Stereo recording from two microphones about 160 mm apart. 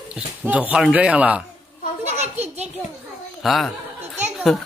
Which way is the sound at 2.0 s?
45° right (ahead or behind).